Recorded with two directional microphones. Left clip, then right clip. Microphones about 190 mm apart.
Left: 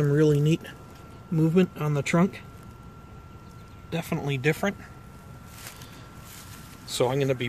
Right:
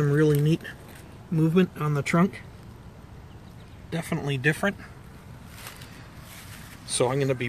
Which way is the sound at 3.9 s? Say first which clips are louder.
Even; 5° left (ahead or behind).